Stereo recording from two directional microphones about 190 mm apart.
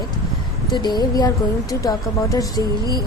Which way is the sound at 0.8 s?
20° left (ahead or behind).